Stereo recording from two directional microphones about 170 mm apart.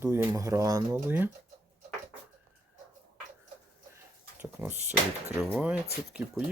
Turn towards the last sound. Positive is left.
turn(degrees=-5)  # may be behind; listen again after turning